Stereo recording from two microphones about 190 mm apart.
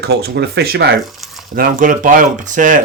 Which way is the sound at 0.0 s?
60° right (ahead or behind).